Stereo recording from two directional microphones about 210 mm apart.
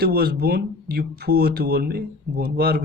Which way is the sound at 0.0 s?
50° right (ahead or behind).